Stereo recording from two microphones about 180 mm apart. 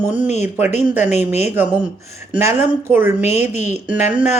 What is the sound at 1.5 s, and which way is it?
Speech, 10° right (ahead or behind).